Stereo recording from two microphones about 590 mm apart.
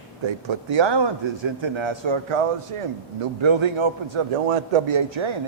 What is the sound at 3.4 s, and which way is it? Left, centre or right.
A man's voice, right.